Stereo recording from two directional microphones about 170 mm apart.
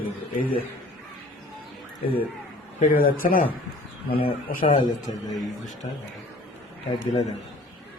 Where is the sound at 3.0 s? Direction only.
55° left (ahead or behind).